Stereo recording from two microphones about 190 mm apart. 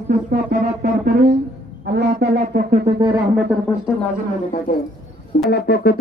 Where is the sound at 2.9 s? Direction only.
25° right (ahead or behind).